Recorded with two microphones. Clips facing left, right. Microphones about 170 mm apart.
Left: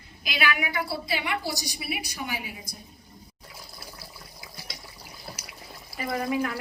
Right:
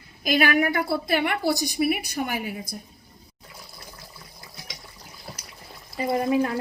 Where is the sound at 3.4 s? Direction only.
5° left (ahead or behind).